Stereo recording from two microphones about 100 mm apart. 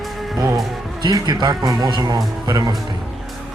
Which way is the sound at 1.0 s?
45° right (ahead or behind).